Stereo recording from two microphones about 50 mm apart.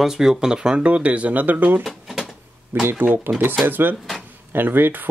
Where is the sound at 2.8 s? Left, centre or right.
Right.